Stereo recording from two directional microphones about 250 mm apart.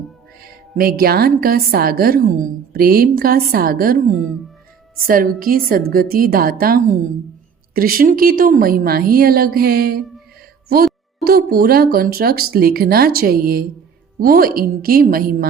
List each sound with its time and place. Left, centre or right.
0.4 s a woman's voice: right
5.0 s a woman's voice: right